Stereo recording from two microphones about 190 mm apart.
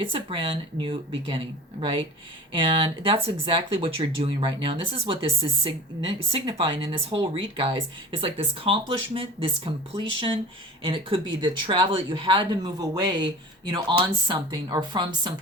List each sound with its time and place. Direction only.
0.0 s speech: 30° right (ahead or behind)